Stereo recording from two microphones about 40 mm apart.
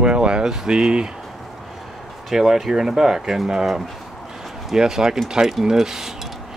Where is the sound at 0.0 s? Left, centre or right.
Right.